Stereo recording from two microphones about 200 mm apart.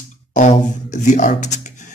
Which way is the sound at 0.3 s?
35° left (ahead or behind).